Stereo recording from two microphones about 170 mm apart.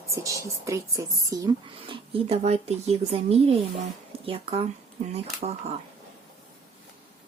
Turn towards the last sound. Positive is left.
turn(degrees=-40)  # may be behind; listen again after turning